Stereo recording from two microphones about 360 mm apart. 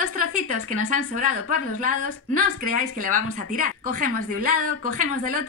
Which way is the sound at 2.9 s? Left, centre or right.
Right.